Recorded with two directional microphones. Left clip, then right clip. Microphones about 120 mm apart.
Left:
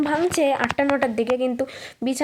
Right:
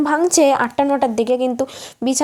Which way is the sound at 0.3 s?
55° right (ahead or behind).